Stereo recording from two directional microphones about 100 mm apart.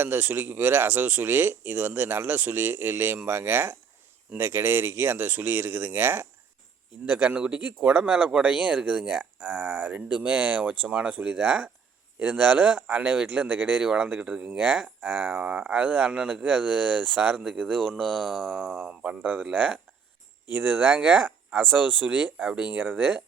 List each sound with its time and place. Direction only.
0.0 s speech: 20° right (ahead or behind)
12.6 s speech: 5° right (ahead or behind); by 20.9 s 20° right (ahead or behind)
20.9 s speech: 5° right (ahead or behind)
21.7 s speech: 20° right (ahead or behind)
22.4 s speech: 5° right (ahead or behind)
22.6 s speech: 15° right (ahead or behind)